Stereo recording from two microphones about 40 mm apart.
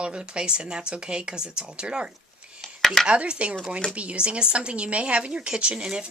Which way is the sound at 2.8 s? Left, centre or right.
Centre.